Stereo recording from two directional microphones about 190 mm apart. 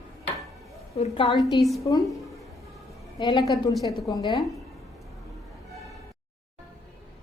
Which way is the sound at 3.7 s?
Centre (ahead or behind).